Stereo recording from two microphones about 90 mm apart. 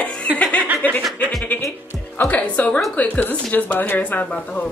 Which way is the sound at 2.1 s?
15° left (ahead or behind).